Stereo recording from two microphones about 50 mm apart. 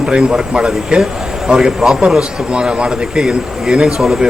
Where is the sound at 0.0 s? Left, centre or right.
Centre.